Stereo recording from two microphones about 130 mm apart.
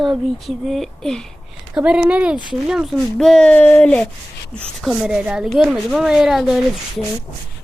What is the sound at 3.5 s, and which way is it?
Speech, 15° left (ahead or behind).